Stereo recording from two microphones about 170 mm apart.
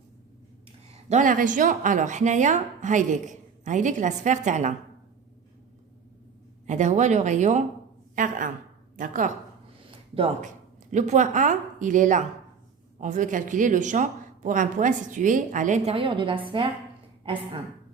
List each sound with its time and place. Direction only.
1.1 s speech: 50° right (ahead or behind)
6.7 s a woman's voice: 45° right (ahead or behind)
10.9 s speech: 45° right (ahead or behind)
16.0 s a woman's voice: 30° right (ahead or behind)